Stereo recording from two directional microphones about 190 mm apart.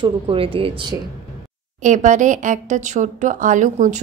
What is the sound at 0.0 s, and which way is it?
Speech, 30° right (ahead or behind).